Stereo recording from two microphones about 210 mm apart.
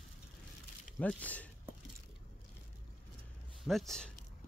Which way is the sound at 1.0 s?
5° left (ahead or behind).